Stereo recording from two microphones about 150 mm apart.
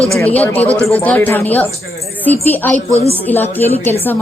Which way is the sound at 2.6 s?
15° left (ahead or behind).